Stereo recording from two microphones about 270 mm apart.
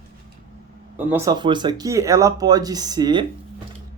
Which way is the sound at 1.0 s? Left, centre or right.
Centre.